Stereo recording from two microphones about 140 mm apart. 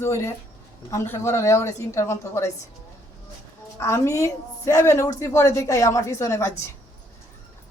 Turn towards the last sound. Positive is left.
turn(degrees=20)  # may be behind; listen again after turning